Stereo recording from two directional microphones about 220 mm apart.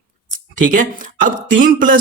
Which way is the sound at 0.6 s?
35° right (ahead or behind).